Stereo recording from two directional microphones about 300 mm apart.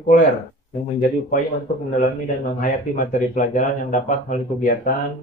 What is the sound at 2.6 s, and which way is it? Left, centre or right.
Speech, left.